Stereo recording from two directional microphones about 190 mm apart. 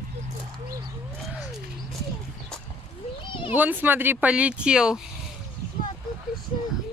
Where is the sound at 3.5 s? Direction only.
10° right (ahead or behind).